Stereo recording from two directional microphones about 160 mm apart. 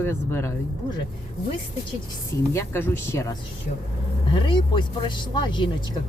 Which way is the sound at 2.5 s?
15° left (ahead or behind).